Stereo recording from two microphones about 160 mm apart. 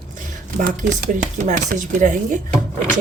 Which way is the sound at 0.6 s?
55° right (ahead or behind).